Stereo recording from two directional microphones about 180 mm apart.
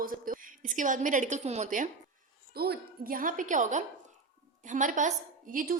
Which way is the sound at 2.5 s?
60° right (ahead or behind).